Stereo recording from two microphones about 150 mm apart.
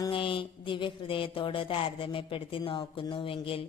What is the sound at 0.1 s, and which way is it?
Speech, 35° left (ahead or behind).